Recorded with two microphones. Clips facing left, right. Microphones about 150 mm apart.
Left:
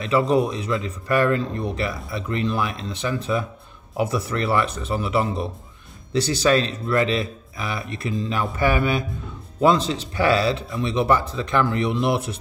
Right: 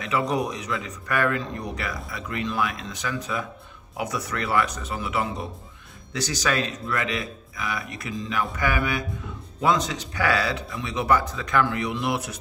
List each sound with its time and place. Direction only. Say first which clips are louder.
0.0 s a man's voice: left 6 dB; 30° left (ahead or behind)